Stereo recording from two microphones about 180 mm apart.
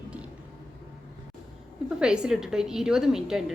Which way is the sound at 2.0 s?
5° right (ahead or behind).